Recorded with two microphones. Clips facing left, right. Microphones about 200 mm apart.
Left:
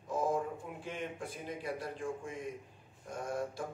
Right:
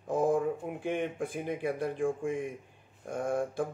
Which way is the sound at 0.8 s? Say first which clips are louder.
Right 9 dB; 55° right (ahead or behind).